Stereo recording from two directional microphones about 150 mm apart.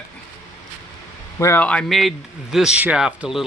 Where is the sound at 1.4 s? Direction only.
15° left (ahead or behind).